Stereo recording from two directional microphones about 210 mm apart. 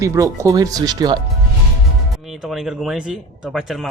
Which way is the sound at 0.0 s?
15° right (ahead or behind).